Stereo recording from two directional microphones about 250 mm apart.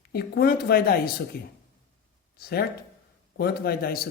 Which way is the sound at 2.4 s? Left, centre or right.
Left.